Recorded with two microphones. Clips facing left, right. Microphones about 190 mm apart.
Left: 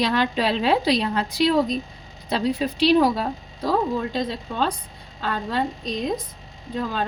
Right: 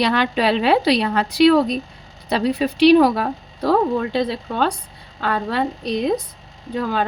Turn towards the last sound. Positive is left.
turn(degrees=-70)  # may be behind; listen again after turning